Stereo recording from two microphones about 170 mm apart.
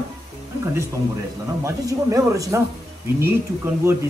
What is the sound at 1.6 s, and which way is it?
A man's voice, 20° right (ahead or behind).